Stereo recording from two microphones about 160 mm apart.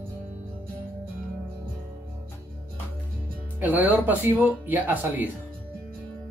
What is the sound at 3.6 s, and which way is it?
Speech, 10° right (ahead or behind).